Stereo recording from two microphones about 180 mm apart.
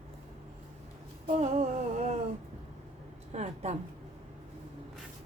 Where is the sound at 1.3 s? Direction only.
40° right (ahead or behind).